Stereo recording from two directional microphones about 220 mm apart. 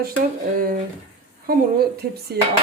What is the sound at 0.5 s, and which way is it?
Speech, 40° right (ahead or behind).